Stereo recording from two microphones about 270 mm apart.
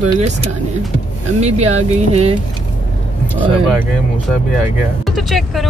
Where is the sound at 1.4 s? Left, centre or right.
Right.